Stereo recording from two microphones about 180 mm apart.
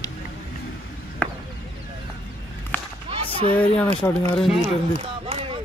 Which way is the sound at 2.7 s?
10° left (ahead or behind).